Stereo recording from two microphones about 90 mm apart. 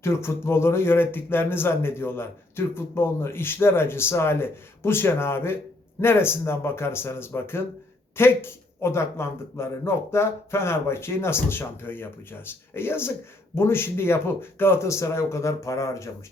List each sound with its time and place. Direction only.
0.0 s speech: 30° left (ahead or behind)